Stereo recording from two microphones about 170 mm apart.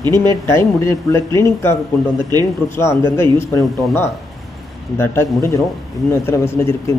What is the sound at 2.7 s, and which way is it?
Speech, 15° left (ahead or behind).